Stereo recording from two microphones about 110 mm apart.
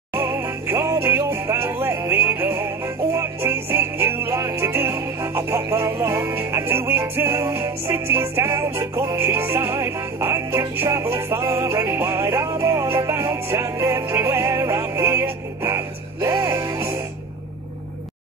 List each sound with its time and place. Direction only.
0.1 s music: 25° right (ahead or behind)